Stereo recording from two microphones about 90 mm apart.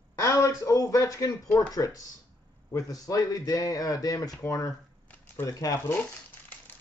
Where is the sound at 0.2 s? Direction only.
35° left (ahead or behind).